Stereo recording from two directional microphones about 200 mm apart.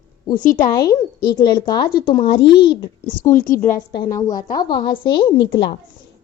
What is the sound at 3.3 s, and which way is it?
Speech, 40° left (ahead or behind).